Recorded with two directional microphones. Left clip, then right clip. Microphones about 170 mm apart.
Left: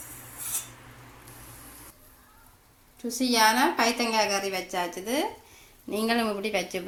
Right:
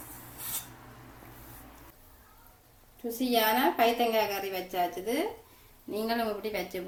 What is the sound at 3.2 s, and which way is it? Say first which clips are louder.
A woman's voice: left 4 dB; 30° left (ahead or behind).